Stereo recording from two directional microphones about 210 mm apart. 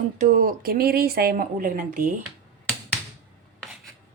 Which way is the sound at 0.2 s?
40° right (ahead or behind).